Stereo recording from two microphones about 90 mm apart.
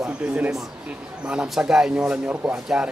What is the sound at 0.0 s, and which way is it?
Speech, 10° right (ahead or behind).